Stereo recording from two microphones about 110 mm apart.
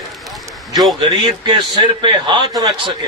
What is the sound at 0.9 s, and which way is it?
A man's voice, 50° right (ahead or behind).